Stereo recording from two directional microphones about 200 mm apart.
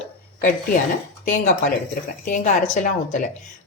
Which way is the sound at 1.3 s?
40° left (ahead or behind).